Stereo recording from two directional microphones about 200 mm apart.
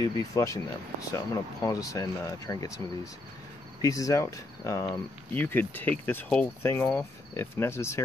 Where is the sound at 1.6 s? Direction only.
15° left (ahead or behind).